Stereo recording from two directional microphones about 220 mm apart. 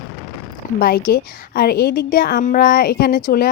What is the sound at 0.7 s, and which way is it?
A woman's voice, 40° left (ahead or behind).